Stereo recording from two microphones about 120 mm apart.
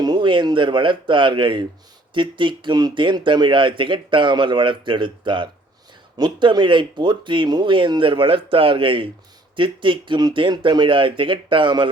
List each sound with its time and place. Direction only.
0.0 s speech: 40° right (ahead or behind)